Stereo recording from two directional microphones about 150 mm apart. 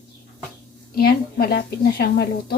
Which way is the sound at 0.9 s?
90° left.